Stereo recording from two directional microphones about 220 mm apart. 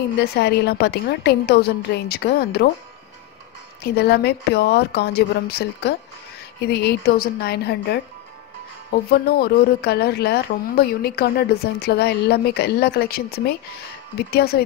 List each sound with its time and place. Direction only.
0.2 s a woman's voice: 45° left (ahead or behind)
3.9 s a woman's voice: 45° left (ahead or behind)
9.1 s a woman's voice: 45° left (ahead or behind)